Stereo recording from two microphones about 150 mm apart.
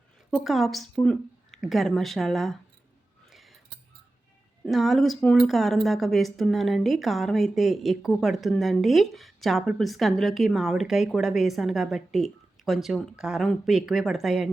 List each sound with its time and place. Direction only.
0.3 s a woman's voice: centre (ahead or behind)
3.2 s a sound: centre (ahead or behind)
4.6 s a woman's voice: centre (ahead or behind)